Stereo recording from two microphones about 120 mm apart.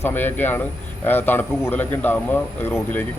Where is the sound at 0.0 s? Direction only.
15° left (ahead or behind).